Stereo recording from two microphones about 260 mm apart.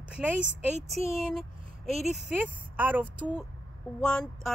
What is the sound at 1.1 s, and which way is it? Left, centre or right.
Speech, centre.